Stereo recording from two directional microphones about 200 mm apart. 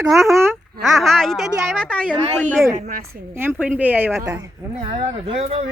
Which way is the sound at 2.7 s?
35° right (ahead or behind).